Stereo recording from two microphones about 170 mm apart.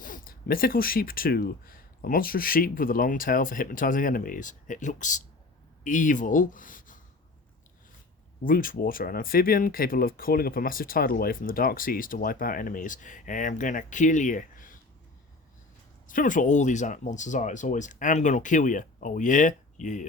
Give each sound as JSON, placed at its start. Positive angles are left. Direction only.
{"t": 0.0, "sound": "speech", "side_deg": 55}
{"t": 8.4, "sound": "speech", "side_deg": 55}
{"t": 16.0, "sound": "speech", "side_deg": 50}